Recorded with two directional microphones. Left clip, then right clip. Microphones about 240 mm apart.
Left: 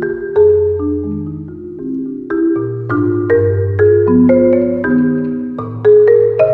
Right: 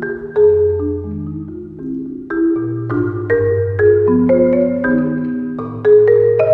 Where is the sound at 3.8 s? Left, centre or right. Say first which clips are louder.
Left 3 dB; centre.